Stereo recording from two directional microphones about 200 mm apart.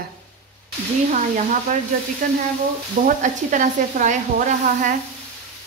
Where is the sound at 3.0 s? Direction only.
40° right (ahead or behind).